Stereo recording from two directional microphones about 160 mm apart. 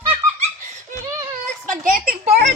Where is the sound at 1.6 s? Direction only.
60° right (ahead or behind).